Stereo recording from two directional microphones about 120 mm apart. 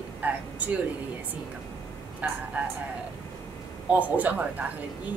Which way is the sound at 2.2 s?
10° right (ahead or behind).